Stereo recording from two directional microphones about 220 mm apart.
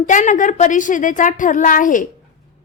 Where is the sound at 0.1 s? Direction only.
35° left (ahead or behind).